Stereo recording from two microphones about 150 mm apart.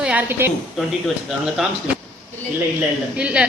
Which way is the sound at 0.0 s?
10° right (ahead or behind).